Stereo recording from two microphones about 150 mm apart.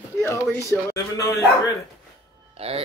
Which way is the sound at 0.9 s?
20° left (ahead or behind).